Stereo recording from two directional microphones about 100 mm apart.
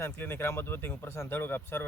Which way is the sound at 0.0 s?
20° left (ahead or behind).